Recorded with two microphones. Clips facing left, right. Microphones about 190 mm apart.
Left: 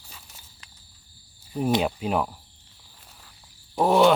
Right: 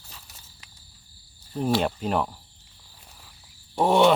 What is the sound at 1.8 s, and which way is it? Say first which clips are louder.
Speech: even; 5° left (ahead or behind).